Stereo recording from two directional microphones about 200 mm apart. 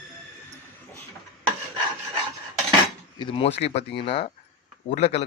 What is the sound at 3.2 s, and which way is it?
A man's voice, 25° left (ahead or behind).